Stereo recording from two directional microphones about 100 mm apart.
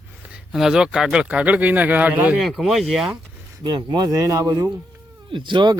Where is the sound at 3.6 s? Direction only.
50° right (ahead or behind).